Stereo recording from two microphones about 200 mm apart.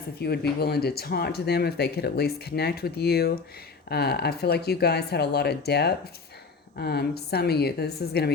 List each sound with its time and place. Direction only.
0.2 s speech: 55° left (ahead or behind)